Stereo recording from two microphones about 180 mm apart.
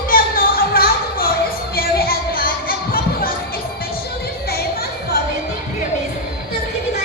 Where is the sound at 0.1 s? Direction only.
55° left (ahead or behind).